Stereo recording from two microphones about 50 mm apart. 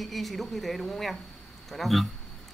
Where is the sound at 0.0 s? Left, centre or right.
Centre.